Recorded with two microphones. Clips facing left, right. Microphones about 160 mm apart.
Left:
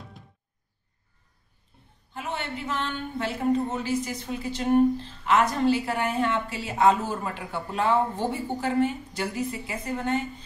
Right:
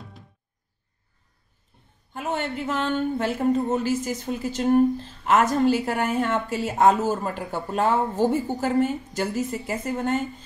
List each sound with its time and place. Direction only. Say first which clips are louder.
2.1 s a woman's voice: right 5 dB; 45° right (ahead or behind)